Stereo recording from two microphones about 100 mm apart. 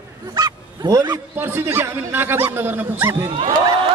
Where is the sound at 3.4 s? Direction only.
60° right (ahead or behind).